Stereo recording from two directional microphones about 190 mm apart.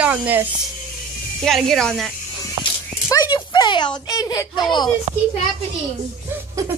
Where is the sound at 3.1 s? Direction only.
20° left (ahead or behind).